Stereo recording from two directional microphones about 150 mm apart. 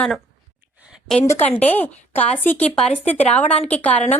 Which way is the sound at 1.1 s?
5° left (ahead or behind).